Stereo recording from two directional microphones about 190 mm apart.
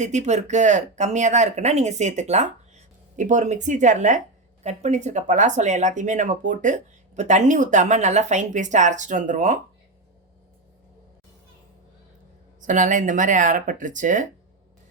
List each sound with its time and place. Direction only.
0.0 s speech: 40° right (ahead or behind)
12.5 s speech: 40° right (ahead or behind)